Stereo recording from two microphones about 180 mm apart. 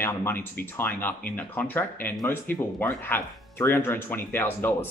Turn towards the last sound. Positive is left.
turn(degrees=10)  # may be behind; listen again after turning